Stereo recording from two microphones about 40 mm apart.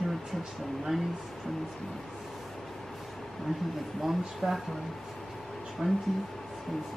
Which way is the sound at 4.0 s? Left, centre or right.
Centre.